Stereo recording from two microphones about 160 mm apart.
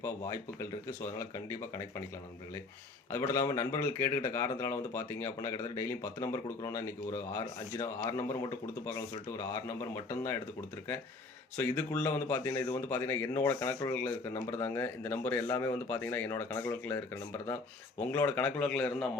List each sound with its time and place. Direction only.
0.0 s speech: 15° left (ahead or behind)
3.1 s speech: 20° left (ahead or behind)
9.4 s speech: 15° left (ahead or behind)
11.5 s speech: 15° left (ahead or behind)